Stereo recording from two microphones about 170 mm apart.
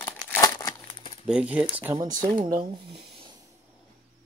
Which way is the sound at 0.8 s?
30° left (ahead or behind).